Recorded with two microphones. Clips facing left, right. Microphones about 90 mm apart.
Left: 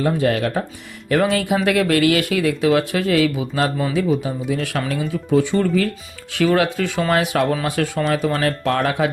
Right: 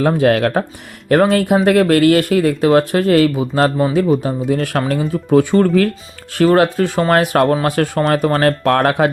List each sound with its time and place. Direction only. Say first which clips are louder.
0.2 s speech: right 6 dB; 65° right (ahead or behind)
1.1 s speech: right 5 dB; 45° right (ahead or behind)
6.3 s speech: right 5 dB; 45° right (ahead or behind)